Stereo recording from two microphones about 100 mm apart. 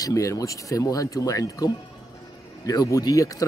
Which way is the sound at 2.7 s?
35° left (ahead or behind).